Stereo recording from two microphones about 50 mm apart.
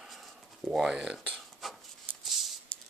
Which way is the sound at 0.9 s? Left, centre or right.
Right.